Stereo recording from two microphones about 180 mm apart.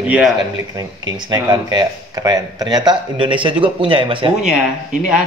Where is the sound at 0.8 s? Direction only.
20° right (ahead or behind).